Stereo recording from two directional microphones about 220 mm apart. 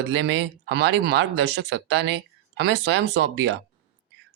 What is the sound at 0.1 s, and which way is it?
Speech, 55° right (ahead or behind).